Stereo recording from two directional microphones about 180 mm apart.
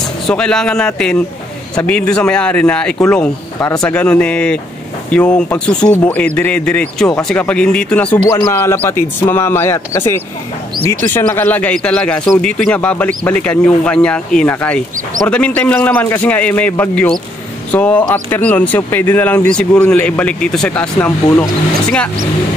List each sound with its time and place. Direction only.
0.3 s speech: 5° left (ahead or behind)
8.3 s speech: 20° left (ahead or behind)
8.5 s speech: 10° left (ahead or behind)